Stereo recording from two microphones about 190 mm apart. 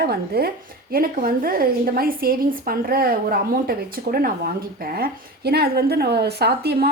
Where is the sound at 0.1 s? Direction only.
55° right (ahead or behind).